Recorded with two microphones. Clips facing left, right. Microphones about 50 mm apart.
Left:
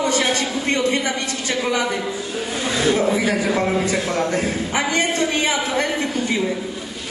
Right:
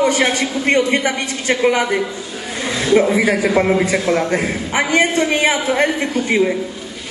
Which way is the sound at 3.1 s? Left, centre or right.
Right.